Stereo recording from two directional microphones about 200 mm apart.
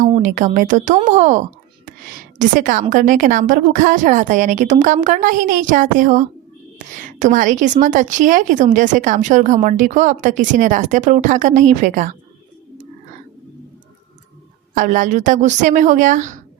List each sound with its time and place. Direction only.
0.0 s a woman's voice: 40° right (ahead or behind)
14.8 s a woman's voice: 40° right (ahead or behind)